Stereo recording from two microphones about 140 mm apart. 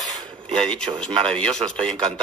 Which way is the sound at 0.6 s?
5° left (ahead or behind).